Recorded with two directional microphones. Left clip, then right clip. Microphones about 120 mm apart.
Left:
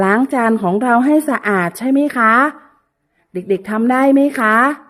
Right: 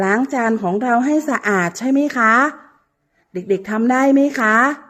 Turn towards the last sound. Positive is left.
turn(degrees=20)  # may be behind; listen again after turning